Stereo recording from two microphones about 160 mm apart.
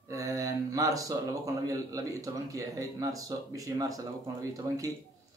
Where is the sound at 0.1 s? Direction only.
20° right (ahead or behind).